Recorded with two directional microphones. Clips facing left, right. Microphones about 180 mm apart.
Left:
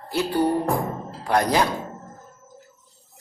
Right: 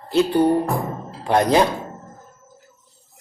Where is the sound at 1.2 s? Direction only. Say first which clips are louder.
Right 4 dB; 25° right (ahead or behind).